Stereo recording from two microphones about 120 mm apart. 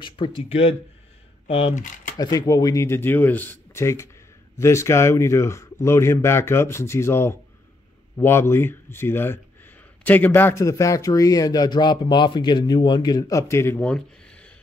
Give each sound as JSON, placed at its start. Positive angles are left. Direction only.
{"t": 0.0, "sound": "speech", "side_deg": 45}
{"t": 1.7, "sound": "speech", "side_deg": 90}
{"t": 2.1, "sound": "speech", "side_deg": 35}
{"t": 13.8, "sound": "a sound", "side_deg": 10}